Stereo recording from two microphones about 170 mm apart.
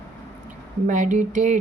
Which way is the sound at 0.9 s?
45° right (ahead or behind).